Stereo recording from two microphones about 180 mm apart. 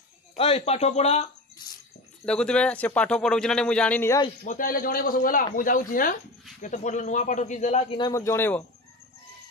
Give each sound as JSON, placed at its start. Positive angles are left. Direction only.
{"t": 0.4, "sound": "speech", "side_deg": 35}
{"t": 2.2, "sound": "a man's voice", "side_deg": 5}
{"t": 4.5, "sound": "speech", "side_deg": 50}
{"t": 8.0, "sound": "a man's voice", "side_deg": 15}